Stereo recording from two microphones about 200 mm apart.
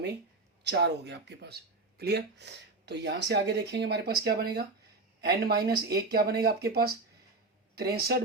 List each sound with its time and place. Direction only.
0.6 s speech: 60° right (ahead or behind)